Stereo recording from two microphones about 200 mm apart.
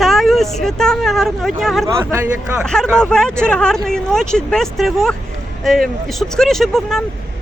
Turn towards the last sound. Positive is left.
turn(degrees=0)  # may be behind; listen again after turning